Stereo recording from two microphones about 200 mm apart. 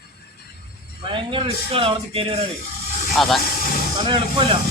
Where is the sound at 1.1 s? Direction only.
25° right (ahead or behind).